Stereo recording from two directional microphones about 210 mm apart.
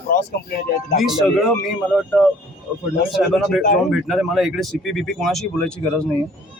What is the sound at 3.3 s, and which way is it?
Speech, centre (ahead or behind).